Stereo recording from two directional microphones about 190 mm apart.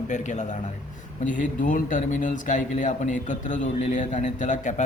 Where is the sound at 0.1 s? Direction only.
40° left (ahead or behind).